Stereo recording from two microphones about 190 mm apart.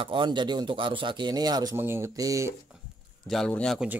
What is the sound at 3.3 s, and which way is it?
Speech, 5° left (ahead or behind).